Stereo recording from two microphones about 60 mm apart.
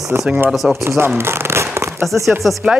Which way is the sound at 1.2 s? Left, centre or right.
Right.